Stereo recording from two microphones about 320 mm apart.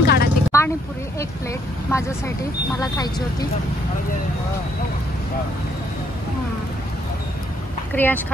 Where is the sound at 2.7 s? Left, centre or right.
Centre.